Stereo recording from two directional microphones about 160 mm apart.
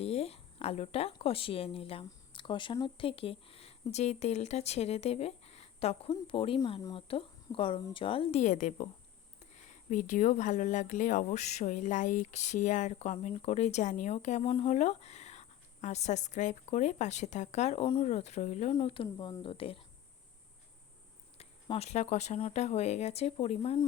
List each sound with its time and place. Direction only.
0.0 s a woman's voice: 40° left (ahead or behind)
9.9 s speech: 55° left (ahead or behind)
18.7 s speech: 35° left (ahead or behind)
21.3 s speech: 40° left (ahead or behind)